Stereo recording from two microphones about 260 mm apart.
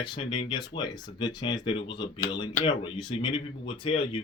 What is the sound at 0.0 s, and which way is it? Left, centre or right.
Speech, centre.